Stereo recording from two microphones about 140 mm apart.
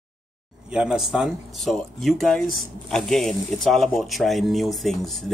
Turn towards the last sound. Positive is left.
turn(degrees=0)  # may be behind; listen again after turning